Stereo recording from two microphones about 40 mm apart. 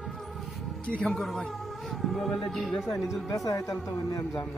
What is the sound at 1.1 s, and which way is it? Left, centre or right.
Speech, centre.